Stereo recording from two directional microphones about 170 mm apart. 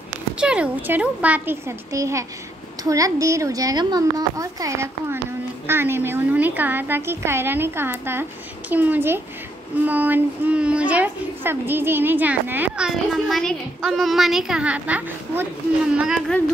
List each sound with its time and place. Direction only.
0.4 s a child's voice: 5° right (ahead or behind)